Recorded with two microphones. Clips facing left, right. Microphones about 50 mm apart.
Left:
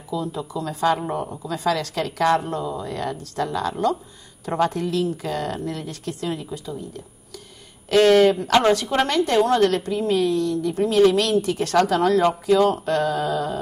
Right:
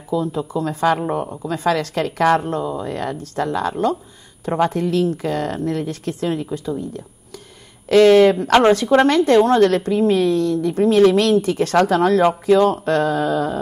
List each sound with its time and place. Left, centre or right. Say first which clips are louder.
0.1 s a woman's voice: right 6 dB; right
4.5 s speech: right 3 dB; right
4.7 s speech: right 5 dB; right
7.9 s a woman's voice: right 4 dB; right